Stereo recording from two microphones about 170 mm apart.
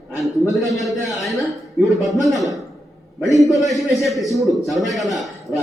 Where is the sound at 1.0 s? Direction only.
Centre (ahead or behind).